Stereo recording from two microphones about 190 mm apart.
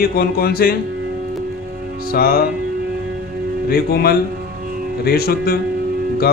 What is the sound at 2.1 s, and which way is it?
Speech, 50° left (ahead or behind).